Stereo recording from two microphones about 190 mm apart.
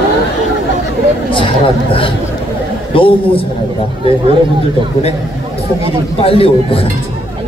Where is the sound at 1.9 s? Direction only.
30° left (ahead or behind).